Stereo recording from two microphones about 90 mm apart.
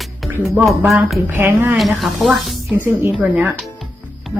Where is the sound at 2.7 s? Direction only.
25° right (ahead or behind).